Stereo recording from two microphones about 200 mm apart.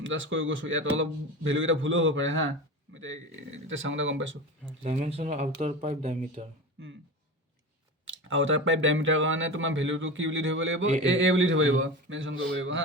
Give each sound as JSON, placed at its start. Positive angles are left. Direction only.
{"t": 0.0, "sound": "speech", "side_deg": -70}
{"t": 4.8, "sound": "speech", "side_deg": -35}
{"t": 8.0, "sound": "speech", "side_deg": -75}